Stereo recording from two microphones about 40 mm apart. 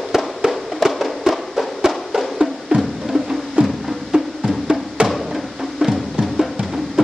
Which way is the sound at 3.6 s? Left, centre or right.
Right.